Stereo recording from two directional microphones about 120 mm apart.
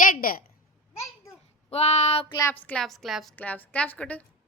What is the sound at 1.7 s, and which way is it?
Child singing, 65° left (ahead or behind).